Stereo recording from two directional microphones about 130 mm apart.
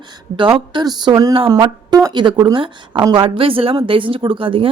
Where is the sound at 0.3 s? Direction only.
40° right (ahead or behind).